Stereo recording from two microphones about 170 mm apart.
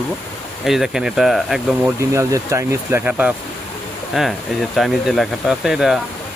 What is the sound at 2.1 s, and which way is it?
Speech, 15° right (ahead or behind).